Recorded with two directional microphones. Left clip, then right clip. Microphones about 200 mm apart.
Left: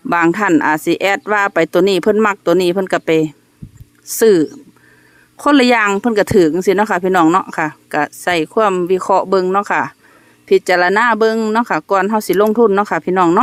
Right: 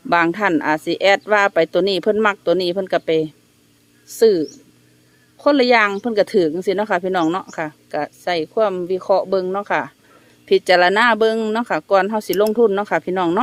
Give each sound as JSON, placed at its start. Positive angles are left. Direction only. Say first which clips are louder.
{"t": 0.1, "sound": "speech", "louder": "left 3 dB", "side_deg": 25}